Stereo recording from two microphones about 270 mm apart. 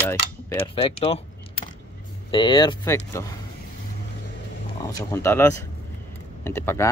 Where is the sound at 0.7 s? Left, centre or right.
Left.